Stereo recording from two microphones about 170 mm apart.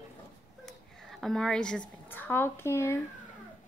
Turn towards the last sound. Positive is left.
turn(degrees=15)  # may be behind; listen again after turning